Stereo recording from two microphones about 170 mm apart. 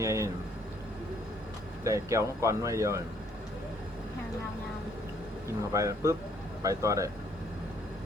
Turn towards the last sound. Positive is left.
turn(degrees=-20)  # may be behind; listen again after turning